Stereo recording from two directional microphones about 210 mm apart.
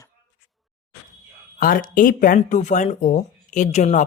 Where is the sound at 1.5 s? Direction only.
40° left (ahead or behind).